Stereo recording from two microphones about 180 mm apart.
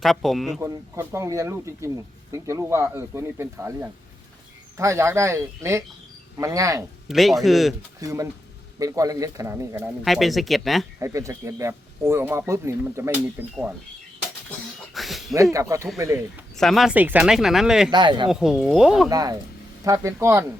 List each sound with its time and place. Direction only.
0.0 s speech: centre (ahead or behind)
0.6 s speech: 15° right (ahead or behind)
7.1 s speech: centre (ahead or behind)
8.0 s speech: 20° right (ahead or behind)
10.0 s speech: centre (ahead or behind)
11.0 s speech: 15° right (ahead or behind)
14.9 s a sound: centre (ahead or behind)
15.5 s speech: 15° right (ahead or behind)
16.6 s speech: centre (ahead or behind)
17.9 s speech: 25° right (ahead or behind)
18.3 s speech: 5° right (ahead or behind)
19.0 s speech: 20° right (ahead or behind)